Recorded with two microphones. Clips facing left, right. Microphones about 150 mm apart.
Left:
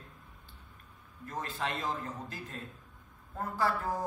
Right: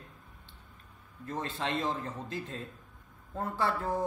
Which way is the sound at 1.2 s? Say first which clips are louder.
Right 2 dB; 25° right (ahead or behind).